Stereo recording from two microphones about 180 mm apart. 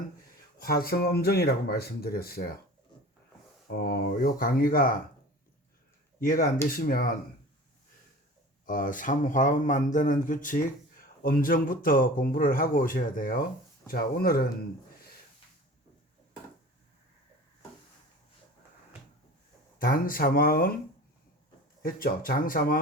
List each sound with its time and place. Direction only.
0.6 s speech: 55° left (ahead or behind)
3.7 s speech: 65° left (ahead or behind)
6.1 s speech: 50° left (ahead or behind)
8.6 s speech: 50° left (ahead or behind)
19.8 s speech: 50° left (ahead or behind)
21.8 s speech: 55° left (ahead or behind)